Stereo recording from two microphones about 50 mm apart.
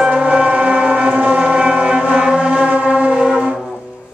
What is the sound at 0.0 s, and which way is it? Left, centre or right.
Music, right.